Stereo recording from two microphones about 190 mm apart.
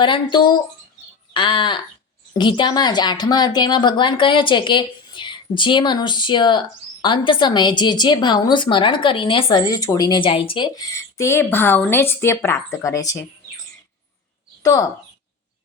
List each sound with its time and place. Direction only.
0.0 s speech: 25° left (ahead or behind)
14.6 s speech: 20° left (ahead or behind)